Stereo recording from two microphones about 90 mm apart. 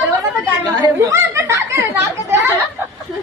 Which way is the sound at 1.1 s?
30° right (ahead or behind).